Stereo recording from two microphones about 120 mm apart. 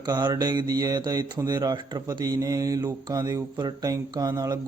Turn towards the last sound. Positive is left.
turn(degrees=-35)  # may be behind; listen again after turning